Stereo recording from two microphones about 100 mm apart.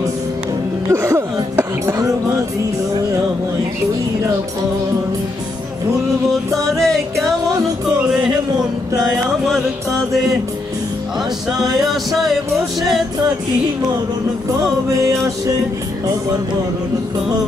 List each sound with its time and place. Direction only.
0.8 s a sound: 30° right (ahead or behind)
6.5 s music: centre (ahead or behind)
11.8 s music: centre (ahead or behind)